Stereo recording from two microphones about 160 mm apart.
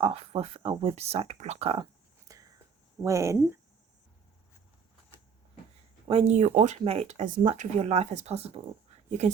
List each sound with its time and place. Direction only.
0.0 s speech: 35° right (ahead or behind)
2.2 s whispering: 20° right (ahead or behind)
3.0 s speech: 20° right (ahead or behind)
6.1 s speech: 40° right (ahead or behind)